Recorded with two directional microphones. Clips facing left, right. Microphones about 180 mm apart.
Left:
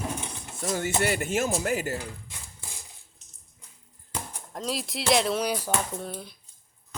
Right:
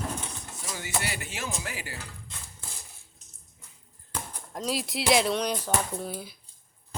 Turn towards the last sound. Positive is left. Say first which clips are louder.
# right 1 dB
turn(degrees=-5)  # may be behind; listen again after turning